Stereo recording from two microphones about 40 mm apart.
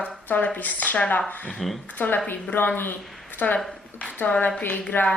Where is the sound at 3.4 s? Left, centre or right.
Left.